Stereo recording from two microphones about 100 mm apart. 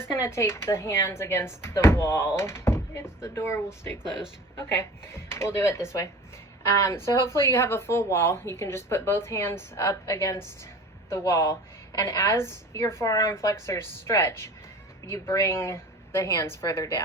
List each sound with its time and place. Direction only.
0.0 s a woman's voice: 25° left (ahead or behind)